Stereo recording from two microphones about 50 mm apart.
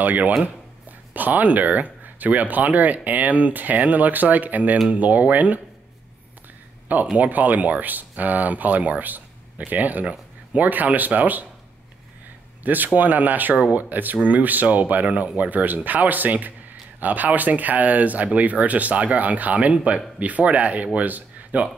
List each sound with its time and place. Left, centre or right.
0.0 s speech: right
7.2 s speech: right
12.6 s speech: right
13.6 s speech: right
13.8 s speech: right